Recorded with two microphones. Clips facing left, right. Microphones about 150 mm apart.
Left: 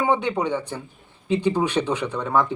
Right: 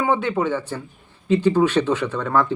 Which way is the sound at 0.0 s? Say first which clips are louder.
Right 1 dB; 15° left (ahead or behind).